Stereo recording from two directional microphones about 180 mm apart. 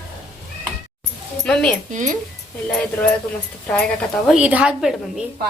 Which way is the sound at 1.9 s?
45° right (ahead or behind).